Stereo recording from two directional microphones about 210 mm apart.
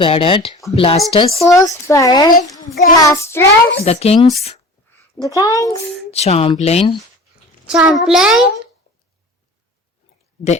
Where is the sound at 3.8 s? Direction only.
30° left (ahead or behind).